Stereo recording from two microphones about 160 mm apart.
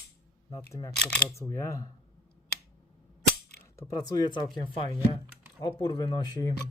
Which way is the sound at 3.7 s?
20° left (ahead or behind).